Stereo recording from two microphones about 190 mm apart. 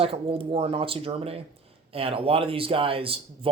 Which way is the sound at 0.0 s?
30° right (ahead or behind).